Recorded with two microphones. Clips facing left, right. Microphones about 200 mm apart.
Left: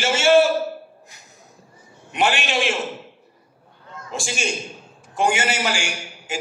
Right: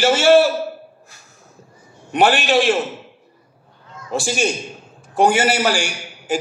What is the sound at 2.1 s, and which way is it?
Speech, 35° right (ahead or behind).